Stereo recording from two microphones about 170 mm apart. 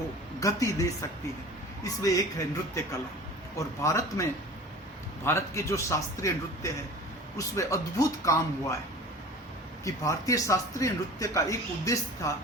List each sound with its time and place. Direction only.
0.3 s speech: 20° left (ahead or behind)
3.8 s a man's voice: 15° left (ahead or behind)
9.8 s speech: 20° left (ahead or behind)